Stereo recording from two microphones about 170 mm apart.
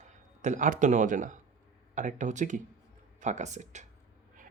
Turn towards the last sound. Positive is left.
turn(degrees=-45)  # may be behind; listen again after turning